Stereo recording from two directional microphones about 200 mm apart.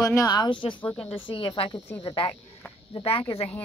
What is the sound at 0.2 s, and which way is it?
Speech, 20° left (ahead or behind).